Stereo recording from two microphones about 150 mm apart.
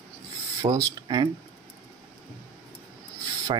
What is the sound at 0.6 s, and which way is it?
Speech, 25° right (ahead or behind).